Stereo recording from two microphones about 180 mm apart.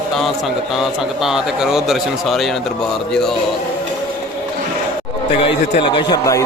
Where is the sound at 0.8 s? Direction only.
5° right (ahead or behind).